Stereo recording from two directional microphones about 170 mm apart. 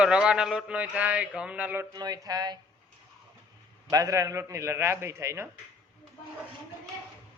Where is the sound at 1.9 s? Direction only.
20° right (ahead or behind).